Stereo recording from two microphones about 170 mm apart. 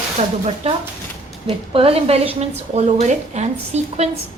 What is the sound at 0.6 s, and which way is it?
A woman's voice, 35° right (ahead or behind).